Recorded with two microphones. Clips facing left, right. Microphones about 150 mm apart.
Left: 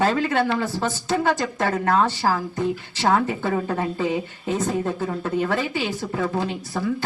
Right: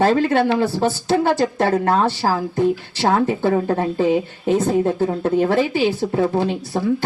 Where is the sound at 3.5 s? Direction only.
35° right (ahead or behind).